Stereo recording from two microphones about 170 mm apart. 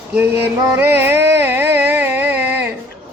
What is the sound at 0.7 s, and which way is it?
Music, 10° right (ahead or behind).